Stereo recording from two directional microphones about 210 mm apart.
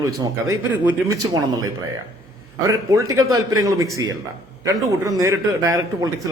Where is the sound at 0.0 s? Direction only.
15° right (ahead or behind).